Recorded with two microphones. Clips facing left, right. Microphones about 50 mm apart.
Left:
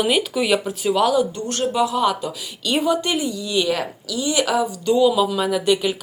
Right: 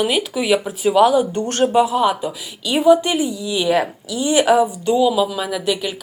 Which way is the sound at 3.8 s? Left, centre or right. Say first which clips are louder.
Right 3 dB; right.